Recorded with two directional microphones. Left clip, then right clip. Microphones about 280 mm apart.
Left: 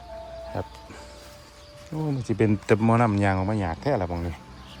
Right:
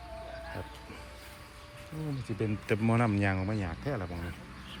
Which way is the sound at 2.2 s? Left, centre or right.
Left.